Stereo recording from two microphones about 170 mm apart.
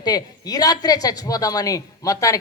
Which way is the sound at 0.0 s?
20° left (ahead or behind).